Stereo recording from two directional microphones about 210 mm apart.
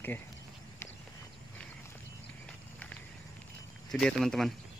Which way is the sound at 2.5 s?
5° left (ahead or behind).